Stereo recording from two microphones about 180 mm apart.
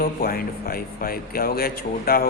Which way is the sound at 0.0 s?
55° left (ahead or behind).